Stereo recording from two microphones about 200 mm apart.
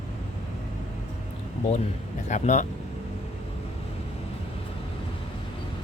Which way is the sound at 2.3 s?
35° left (ahead or behind).